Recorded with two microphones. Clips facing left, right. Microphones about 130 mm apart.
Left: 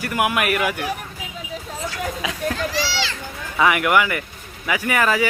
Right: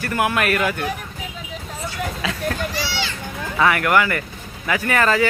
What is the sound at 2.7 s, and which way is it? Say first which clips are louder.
Speech: left 2 dB; 90° left.